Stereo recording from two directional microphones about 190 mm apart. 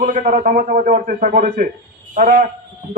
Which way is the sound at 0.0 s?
45° right (ahead or behind).